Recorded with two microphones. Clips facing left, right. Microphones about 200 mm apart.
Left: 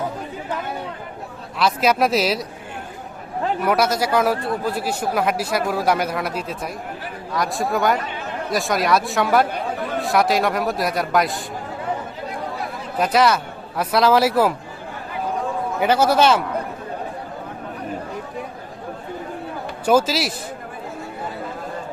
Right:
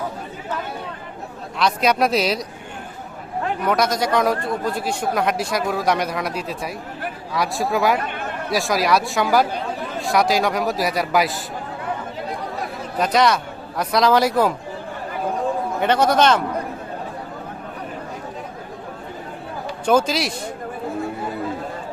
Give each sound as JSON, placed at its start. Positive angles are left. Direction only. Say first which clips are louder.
{"t": 1.5, "sound": "a man's voice", "louder": "even", "side_deg": 5}
{"t": 3.6, "sound": "a man's voice", "louder": "even", "side_deg": 5}
{"t": 8.0, "sound": "a sound", "louder": "right 2 dB", "side_deg": -50}
{"t": 8.4, "sound": "a man's voice", "louder": "even", "side_deg": 0}
{"t": 13.0, "sound": "a man's voice", "louder": "even", "side_deg": 5}
{"t": 15.8, "sound": "a man's voice", "louder": "left 1 dB", "side_deg": 5}
{"t": 19.8, "sound": "a man's voice", "louder": "left 1 dB", "side_deg": 5}